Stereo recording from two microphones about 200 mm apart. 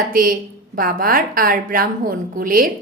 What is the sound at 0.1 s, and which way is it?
A woman's voice, 45° right (ahead or behind).